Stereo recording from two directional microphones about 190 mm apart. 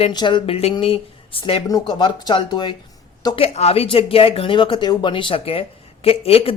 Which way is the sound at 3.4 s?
35° left (ahead or behind).